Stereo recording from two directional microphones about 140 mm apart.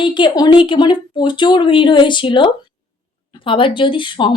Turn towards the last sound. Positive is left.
turn(degrees=35)  # may be behind; listen again after turning